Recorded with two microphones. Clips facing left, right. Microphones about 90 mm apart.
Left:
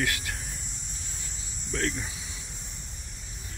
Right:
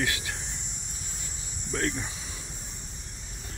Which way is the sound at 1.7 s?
20° right (ahead or behind).